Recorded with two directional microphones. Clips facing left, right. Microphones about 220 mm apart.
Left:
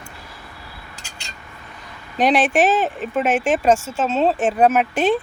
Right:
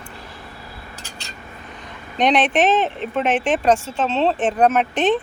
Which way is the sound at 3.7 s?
45° left (ahead or behind).